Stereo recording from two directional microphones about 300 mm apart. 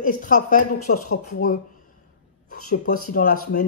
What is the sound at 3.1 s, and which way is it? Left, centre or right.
Speech, left.